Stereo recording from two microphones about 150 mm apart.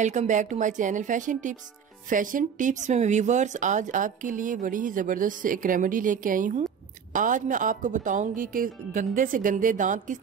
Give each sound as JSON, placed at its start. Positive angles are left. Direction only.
{"t": 0.0, "sound": "speech", "side_deg": -55}